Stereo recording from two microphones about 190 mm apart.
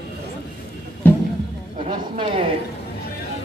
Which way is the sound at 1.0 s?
10° left (ahead or behind).